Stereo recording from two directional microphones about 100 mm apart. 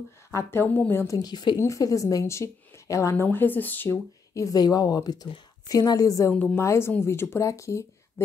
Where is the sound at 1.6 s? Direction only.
35° left (ahead or behind).